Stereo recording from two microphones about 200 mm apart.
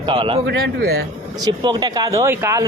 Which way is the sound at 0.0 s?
25° right (ahead or behind).